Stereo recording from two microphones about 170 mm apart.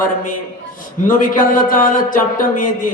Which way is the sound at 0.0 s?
55° left (ahead or behind).